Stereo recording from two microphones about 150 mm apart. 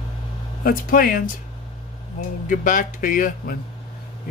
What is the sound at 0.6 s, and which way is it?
Speech, 70° left (ahead or behind).